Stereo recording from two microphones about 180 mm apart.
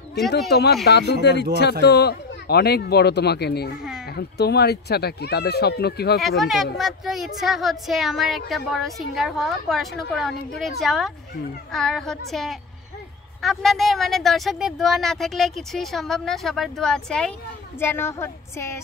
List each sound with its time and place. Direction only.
0.5 s speech: 65° left (ahead or behind)
6.2 s a woman's voice: centre (ahead or behind)